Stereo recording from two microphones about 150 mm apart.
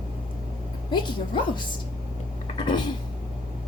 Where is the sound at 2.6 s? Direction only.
30° left (ahead or behind).